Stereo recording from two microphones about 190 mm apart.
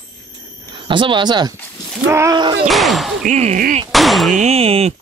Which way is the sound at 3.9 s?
Centre (ahead or behind).